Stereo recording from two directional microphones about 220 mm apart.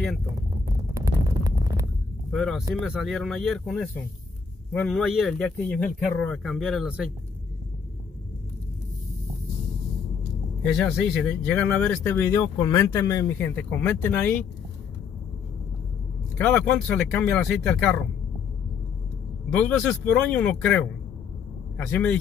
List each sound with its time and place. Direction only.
0.9 s a sound: 15° right (ahead or behind)
2.3 s speech: centre (ahead or behind)
10.6 s speech: centre (ahead or behind)
16.3 s speech: 5° left (ahead or behind)
19.5 s speech: 5° left (ahead or behind)